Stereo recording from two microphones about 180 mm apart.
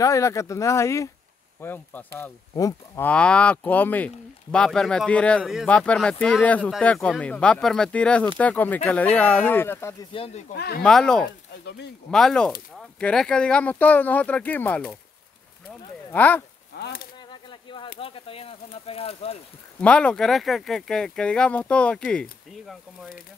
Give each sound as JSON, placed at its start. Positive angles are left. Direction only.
{"t": 0.0, "sound": "speech", "side_deg": 15}
{"t": 3.1, "sound": "speech", "side_deg": 5}
{"t": 10.1, "sound": "speech", "side_deg": 30}
{"t": 10.5, "sound": "speech", "side_deg": 65}
{"t": 10.8, "sound": "speech", "side_deg": 5}
{"t": 11.6, "sound": "speech", "side_deg": 70}
{"t": 12.1, "sound": "speech", "side_deg": 5}
{"t": 16.1, "sound": "speech", "side_deg": 10}
{"t": 16.7, "sound": "speech", "side_deg": 60}
{"t": 17.3, "sound": "a sound", "side_deg": 25}
{"t": 17.9, "sound": "speech", "side_deg": 30}
{"t": 19.8, "sound": "speech", "side_deg": 5}